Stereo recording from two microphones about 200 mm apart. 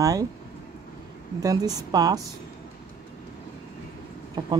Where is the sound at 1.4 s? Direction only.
20° right (ahead or behind).